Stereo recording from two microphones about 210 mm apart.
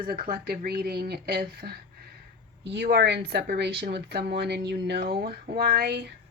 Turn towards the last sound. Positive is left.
turn(degrees=-45)  # may be behind; listen again after turning